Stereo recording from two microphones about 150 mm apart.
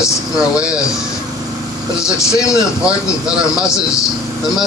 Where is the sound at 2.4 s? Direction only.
20° left (ahead or behind).